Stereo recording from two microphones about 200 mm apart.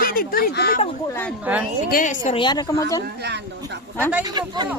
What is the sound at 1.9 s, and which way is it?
Speech, 40° left (ahead or behind).